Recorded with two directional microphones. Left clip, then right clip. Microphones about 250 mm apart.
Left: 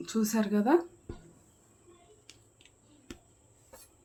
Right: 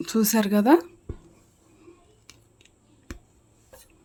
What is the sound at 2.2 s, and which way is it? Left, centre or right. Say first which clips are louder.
Scissors: right 4 dB; centre.